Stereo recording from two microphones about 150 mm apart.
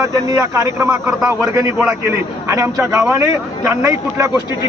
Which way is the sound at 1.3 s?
20° right (ahead or behind).